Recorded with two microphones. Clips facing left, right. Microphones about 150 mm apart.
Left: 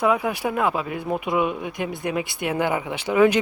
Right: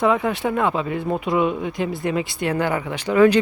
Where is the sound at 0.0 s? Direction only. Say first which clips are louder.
Right 2 dB; 5° left (ahead or behind).